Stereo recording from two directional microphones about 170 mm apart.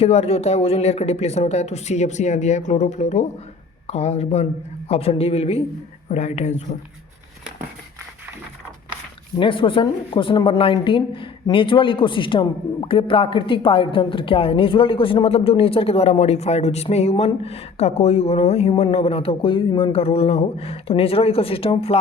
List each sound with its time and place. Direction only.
0.0 s a woman's voice: 40° left (ahead or behind)
9.4 s a woman's voice: 30° left (ahead or behind)